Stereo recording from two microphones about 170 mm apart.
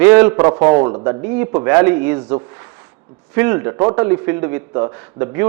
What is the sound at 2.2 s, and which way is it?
Speech, 25° right (ahead or behind).